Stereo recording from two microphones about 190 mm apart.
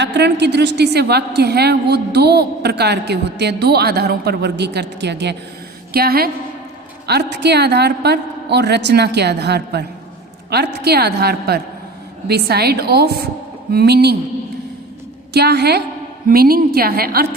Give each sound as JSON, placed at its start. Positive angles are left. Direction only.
{"t": 0.0, "sound": "a woman's voice", "side_deg": -65}
{"t": 15.3, "sound": "a woman's voice", "side_deg": -60}